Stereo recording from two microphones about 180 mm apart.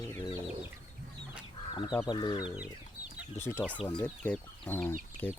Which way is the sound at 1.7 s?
25° left (ahead or behind).